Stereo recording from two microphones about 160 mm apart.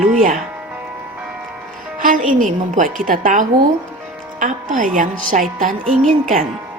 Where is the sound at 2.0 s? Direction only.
55° right (ahead or behind).